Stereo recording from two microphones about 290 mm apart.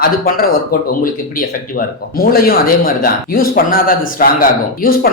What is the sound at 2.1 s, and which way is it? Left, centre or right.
Speech, left.